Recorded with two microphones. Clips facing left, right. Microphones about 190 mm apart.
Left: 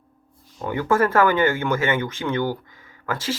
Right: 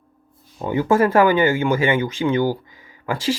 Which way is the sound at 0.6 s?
15° right (ahead or behind).